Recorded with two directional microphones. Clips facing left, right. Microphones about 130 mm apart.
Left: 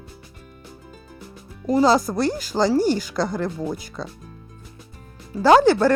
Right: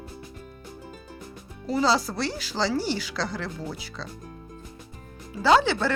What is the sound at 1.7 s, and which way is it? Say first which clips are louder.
A woman's voice: left 6 dB; 45° left (ahead or behind).